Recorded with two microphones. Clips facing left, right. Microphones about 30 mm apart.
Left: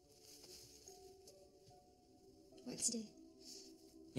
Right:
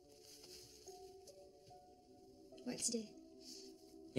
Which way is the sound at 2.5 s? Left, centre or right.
Right.